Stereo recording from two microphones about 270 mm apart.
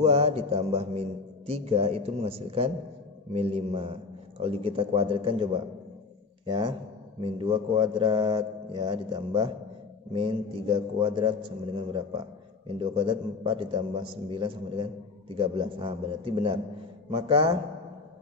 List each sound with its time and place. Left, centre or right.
0.0 s a man's voice: right